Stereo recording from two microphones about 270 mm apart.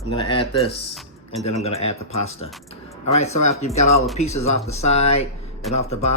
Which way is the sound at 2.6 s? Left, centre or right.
Left.